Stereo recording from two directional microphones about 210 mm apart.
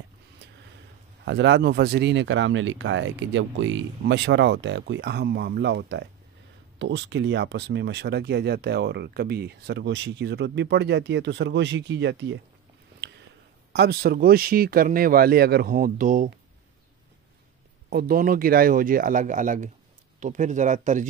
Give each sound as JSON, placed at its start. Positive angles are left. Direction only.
{"t": 1.2, "sound": "speech", "side_deg": -55}
{"t": 13.7, "sound": "speech", "side_deg": -45}
{"t": 17.8, "sound": "speech", "side_deg": -45}